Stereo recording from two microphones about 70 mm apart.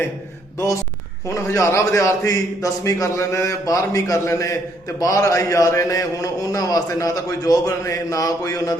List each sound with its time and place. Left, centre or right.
1.3 s a man's voice: left